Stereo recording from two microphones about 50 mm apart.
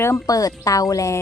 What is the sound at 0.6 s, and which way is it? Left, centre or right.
Speech, left.